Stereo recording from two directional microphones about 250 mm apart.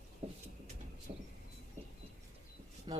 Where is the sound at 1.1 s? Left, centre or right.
Right.